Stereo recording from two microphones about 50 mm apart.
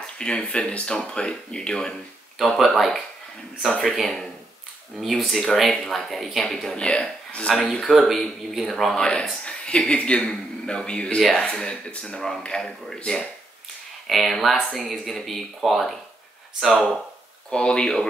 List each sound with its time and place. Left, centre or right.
0.0 s speech: centre
2.3 s speech: centre
6.8 s speech: left
7.4 s speech: centre
8.9 s speech: centre
14.0 s speech: centre
17.5 s speech: centre